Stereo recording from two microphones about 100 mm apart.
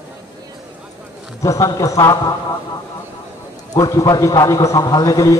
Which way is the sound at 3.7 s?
35° left (ahead or behind).